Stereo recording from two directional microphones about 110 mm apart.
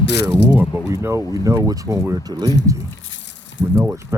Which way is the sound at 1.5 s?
30° right (ahead or behind).